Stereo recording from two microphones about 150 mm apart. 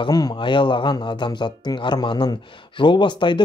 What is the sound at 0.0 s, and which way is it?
Speech, 30° left (ahead or behind).